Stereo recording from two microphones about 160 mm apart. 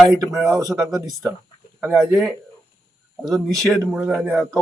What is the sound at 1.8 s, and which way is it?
Speech, 5° right (ahead or behind).